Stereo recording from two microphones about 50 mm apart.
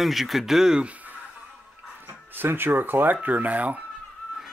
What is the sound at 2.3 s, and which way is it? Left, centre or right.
Speech, right.